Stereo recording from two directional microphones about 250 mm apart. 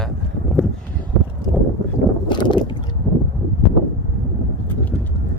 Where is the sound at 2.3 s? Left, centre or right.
Centre.